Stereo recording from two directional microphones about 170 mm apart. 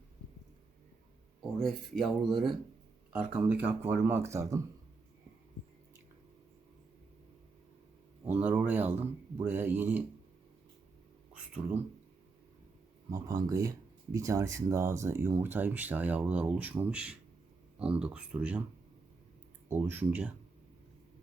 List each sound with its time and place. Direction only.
1.4 s speech: centre (ahead or behind); by 4.6 s 15° right (ahead or behind)
8.3 s speech: 10° right (ahead or behind)
13.1 s speech: 20° right (ahead or behind)
19.6 s speech: 10° right (ahead or behind)